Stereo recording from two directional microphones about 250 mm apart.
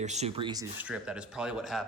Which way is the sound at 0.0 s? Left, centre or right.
Right.